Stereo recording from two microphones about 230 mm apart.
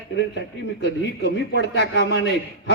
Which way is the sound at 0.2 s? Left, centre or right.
Left.